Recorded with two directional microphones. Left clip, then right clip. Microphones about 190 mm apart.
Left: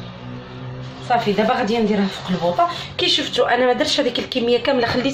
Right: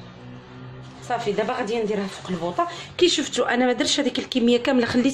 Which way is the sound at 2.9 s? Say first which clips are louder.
Left 1 dB; 60° right (ahead or behind).